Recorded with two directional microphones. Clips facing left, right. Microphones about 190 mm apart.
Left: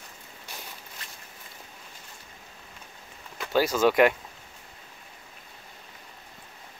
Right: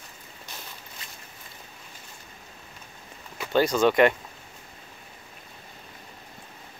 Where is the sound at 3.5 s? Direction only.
5° left (ahead or behind).